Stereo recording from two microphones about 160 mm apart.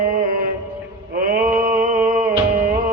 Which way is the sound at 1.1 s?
60° right (ahead or behind).